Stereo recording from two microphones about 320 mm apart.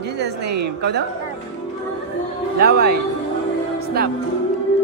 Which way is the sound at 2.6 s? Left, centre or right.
Right.